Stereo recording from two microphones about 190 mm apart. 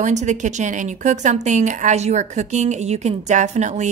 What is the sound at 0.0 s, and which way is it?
Speech, 40° right (ahead or behind).